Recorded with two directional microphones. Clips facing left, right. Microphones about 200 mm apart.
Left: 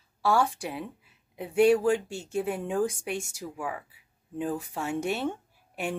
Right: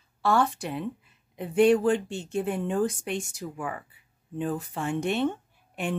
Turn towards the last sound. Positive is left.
turn(degrees=10)  # may be behind; listen again after turning